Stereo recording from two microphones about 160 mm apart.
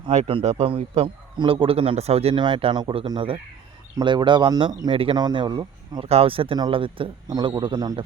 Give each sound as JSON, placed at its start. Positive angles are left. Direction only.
{"t": 0.1, "sound": "a man's voice", "side_deg": -40}
{"t": 6.1, "sound": "a man's voice", "side_deg": -35}